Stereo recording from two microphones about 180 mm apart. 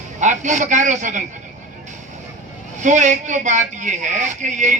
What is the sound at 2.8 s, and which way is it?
Speech, 45° right (ahead or behind).